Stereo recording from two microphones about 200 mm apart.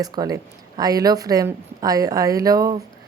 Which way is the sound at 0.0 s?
20° right (ahead or behind).